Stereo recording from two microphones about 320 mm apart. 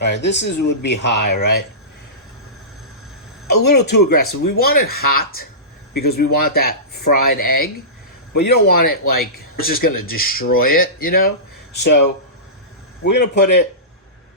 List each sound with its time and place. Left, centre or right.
0.0 s speech: left
3.4 s speech: left